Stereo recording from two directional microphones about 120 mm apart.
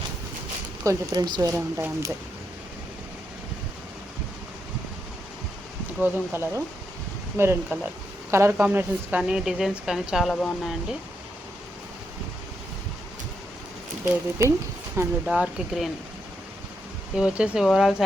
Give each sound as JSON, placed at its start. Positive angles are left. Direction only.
{"t": 0.9, "sound": "speech", "side_deg": -30}
{"t": 6.3, "sound": "a woman's voice", "side_deg": -20}
{"t": 14.0, "sound": "speech", "side_deg": -25}
{"t": 15.3, "sound": "speech", "side_deg": -5}
{"t": 17.2, "sound": "a woman's voice", "side_deg": -10}